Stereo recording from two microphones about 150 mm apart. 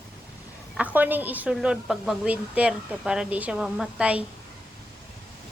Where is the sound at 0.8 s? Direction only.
10° right (ahead or behind).